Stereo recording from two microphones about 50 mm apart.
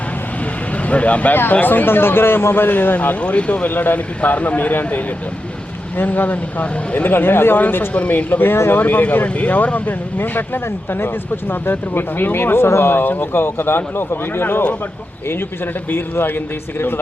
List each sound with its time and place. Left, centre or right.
0.7 s speech: left
1.6 s a man's voice: left
7.1 s speech: left
7.9 s a man's voice: left
10.2 s speech: left